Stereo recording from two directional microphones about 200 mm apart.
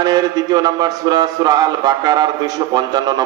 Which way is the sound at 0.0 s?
20° right (ahead or behind).